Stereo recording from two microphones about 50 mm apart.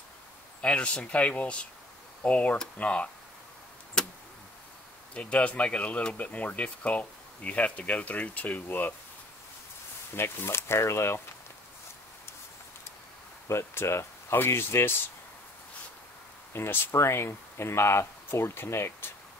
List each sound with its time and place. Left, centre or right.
0.6 s speech: left
4.0 s a sound: centre
5.1 s speech: left
10.1 s speech: left
13.5 s speech: left
14.3 s speech: left
16.5 s speech: left
16.9 s speech: left